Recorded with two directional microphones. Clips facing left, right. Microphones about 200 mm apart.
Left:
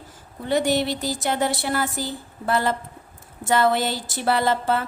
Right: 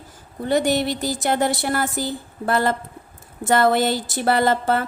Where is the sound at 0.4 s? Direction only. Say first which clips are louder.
Right 2 dB; 45° right (ahead or behind).